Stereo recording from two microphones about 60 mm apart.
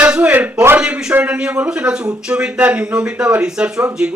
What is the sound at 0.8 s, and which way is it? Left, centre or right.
A man's voice, centre.